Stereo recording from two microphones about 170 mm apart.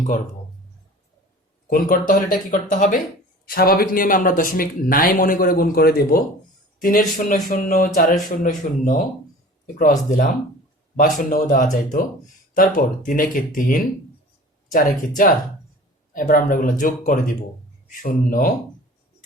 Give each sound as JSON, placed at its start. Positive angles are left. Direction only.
{"t": 1.7, "sound": "speech", "side_deg": 55}
{"t": 3.4, "sound": "speech", "side_deg": 60}
{"t": 10.1, "sound": "speech", "side_deg": 50}